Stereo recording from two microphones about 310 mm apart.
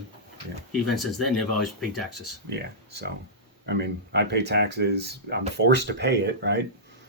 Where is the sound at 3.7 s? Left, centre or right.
Right.